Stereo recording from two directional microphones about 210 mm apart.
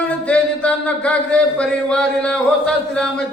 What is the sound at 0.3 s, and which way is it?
A man's voice, 5° left (ahead or behind).